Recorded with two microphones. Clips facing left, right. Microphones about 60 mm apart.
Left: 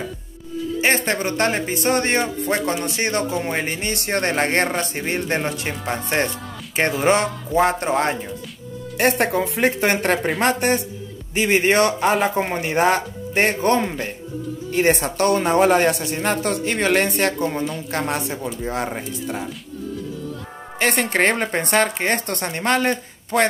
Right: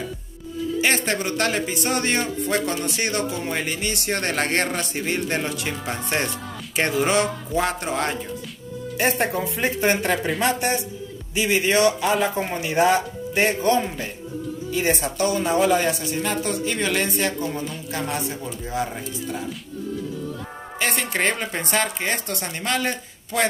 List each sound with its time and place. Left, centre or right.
0.7 s speech: left
8.9 s speech: left
20.8 s speech: left